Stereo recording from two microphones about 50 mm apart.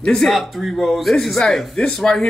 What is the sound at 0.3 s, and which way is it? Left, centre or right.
A man's voice, centre.